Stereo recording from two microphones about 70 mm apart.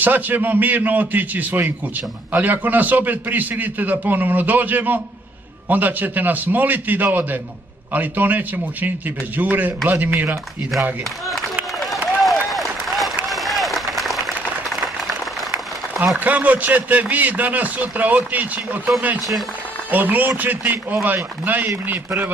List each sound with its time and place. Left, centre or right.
0.0 s a man's voice: right
12.2 s applause: centre
16.3 s a man's voice: right
19.9 s a man's voice: right